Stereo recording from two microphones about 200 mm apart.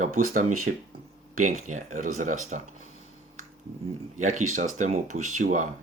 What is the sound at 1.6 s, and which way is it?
Speech, 40° right (ahead or behind).